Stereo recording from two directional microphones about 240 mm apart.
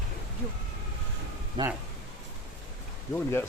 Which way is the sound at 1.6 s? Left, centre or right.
Right.